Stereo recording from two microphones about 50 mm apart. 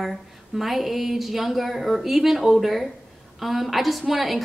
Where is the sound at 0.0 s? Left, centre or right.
Centre.